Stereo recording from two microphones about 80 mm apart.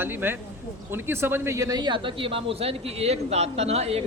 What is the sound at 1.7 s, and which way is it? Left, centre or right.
Speech, right.